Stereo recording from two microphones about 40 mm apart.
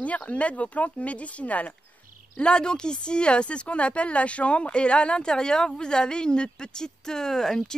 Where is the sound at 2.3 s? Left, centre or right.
Left.